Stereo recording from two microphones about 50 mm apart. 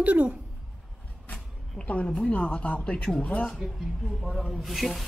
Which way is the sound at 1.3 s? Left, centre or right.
Left.